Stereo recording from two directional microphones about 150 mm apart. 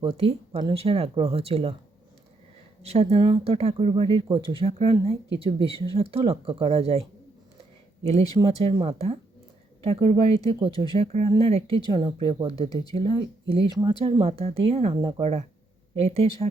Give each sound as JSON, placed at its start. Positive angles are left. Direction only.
{"t": 0.0, "sound": "speech", "side_deg": -40}
{"t": 2.8, "sound": "speech", "side_deg": -45}
{"t": 8.0, "sound": "speech", "side_deg": -45}